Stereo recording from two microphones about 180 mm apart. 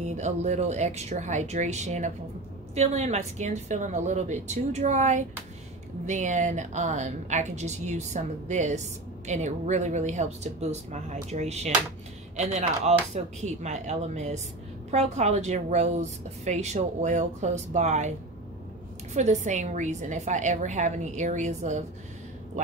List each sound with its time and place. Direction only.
0.0 s a woman's voice: 40° right (ahead or behind)
19.1 s a woman's voice: 40° right (ahead or behind)